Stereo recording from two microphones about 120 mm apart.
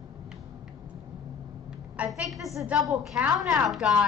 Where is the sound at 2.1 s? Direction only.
Centre (ahead or behind).